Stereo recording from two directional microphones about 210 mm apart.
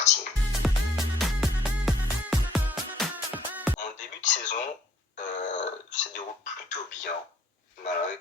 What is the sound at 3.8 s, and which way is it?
Music, 35° left (ahead or behind).